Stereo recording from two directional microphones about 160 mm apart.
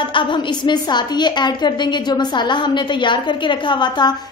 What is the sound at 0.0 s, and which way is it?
A woman's voice, 30° left (ahead or behind).